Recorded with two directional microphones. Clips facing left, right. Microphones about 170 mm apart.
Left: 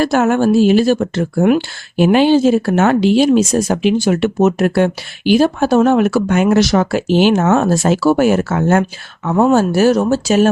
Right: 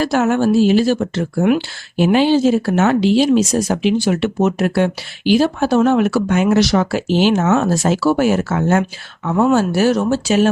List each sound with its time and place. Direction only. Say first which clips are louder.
0.0 s speech: left 2 dB; 50° left (ahead or behind)
9.2 s speech: left 2 dB; 40° left (ahead or behind)